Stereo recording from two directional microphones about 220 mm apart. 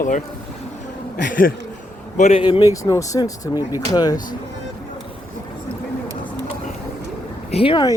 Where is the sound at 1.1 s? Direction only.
40° left (ahead or behind); by 4.2 s 15° left (ahead or behind).